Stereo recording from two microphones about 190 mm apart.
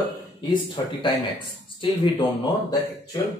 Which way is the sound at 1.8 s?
25° left (ahead or behind).